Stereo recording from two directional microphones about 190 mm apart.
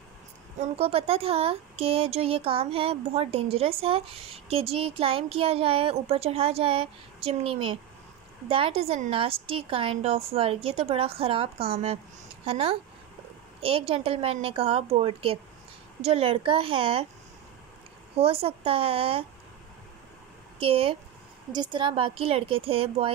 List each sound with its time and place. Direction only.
0.6 s speech: 30° right (ahead or behind)
18.1 s speech: 30° right (ahead or behind)
20.5 s speech: 30° right (ahead or behind)